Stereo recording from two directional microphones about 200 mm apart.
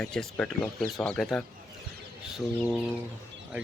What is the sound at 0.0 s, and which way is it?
Speech, 5° left (ahead or behind).